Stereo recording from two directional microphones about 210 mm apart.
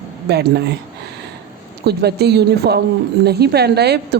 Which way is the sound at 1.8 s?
50° right (ahead or behind).